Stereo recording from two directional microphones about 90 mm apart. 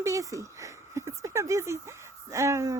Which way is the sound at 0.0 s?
40° right (ahead or behind).